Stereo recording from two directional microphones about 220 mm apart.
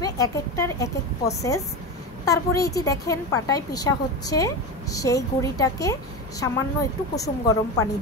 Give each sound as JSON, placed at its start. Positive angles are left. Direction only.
{"t": 0.0, "sound": "a woman's voice", "side_deg": 15}